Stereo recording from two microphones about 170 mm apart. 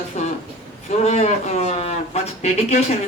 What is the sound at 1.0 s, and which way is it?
Speech, 40° left (ahead or behind).